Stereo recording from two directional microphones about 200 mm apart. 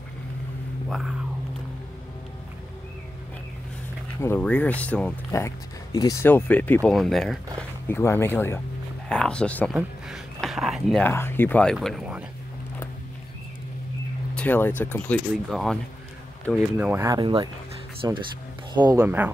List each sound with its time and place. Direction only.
0.8 s speech: centre (ahead or behind)
4.2 s speech: 10° left (ahead or behind)
7.9 s speech: 10° left (ahead or behind)
9.8 s a sound: centre (ahead or behind)
11.1 s speech: 10° left (ahead or behind)
14.3 s speech: 5° left (ahead or behind)
16.7 s speech: 10° right (ahead or behind)